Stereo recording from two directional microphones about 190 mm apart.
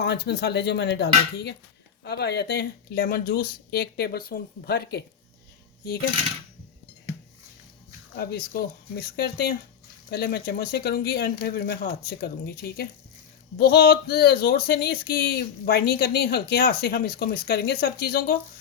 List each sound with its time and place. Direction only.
0.0 s speech: 60° left (ahead or behind)
8.1 s speech: 55° left (ahead or behind)